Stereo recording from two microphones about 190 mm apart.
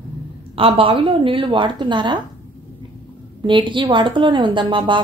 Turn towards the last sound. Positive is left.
turn(degrees=-25)  # may be behind; listen again after turning